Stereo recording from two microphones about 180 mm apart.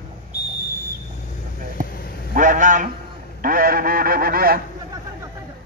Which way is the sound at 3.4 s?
50° right (ahead or behind).